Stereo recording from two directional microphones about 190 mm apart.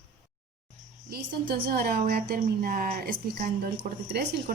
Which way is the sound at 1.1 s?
55° right (ahead or behind).